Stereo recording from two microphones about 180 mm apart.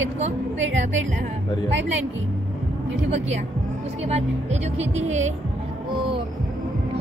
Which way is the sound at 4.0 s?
35° right (ahead or behind).